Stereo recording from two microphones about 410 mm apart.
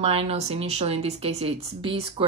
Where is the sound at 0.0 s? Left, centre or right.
Centre.